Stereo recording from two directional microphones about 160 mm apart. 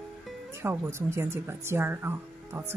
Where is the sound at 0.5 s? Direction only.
15° right (ahead or behind).